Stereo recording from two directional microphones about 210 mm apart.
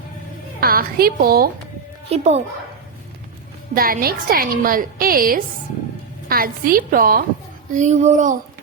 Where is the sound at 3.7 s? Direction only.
45° right (ahead or behind).